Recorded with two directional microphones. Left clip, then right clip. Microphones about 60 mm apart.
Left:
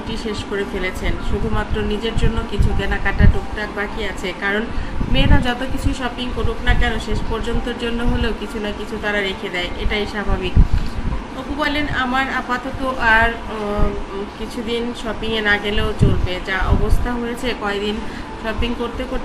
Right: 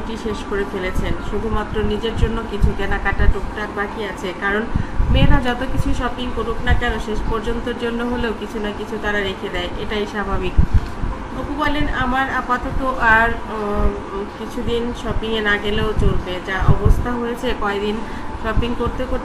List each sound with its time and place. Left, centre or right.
0.3 s speech: centre
11.6 s speech: centre
14.7 s speech: centre